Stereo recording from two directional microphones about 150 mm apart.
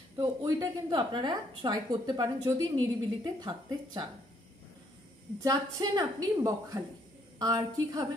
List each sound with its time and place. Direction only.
0.2 s a woman's voice: 25° right (ahead or behind)
5.4 s a woman's voice: 25° right (ahead or behind)